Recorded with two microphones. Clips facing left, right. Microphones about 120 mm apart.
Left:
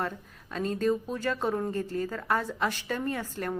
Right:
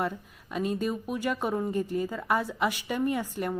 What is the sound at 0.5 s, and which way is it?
Speech, 10° right (ahead or behind).